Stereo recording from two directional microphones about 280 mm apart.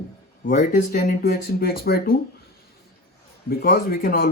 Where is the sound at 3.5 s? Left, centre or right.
Left.